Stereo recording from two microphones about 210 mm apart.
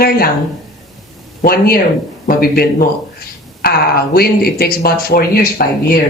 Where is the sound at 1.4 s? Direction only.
45° left (ahead or behind).